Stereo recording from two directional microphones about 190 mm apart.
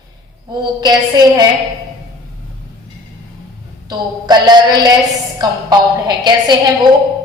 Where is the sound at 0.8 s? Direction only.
20° right (ahead or behind).